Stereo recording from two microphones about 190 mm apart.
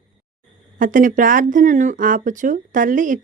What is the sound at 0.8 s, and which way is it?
Speech, 45° right (ahead or behind).